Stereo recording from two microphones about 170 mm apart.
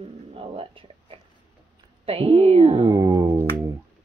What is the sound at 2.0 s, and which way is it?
Speech, 35° right (ahead or behind).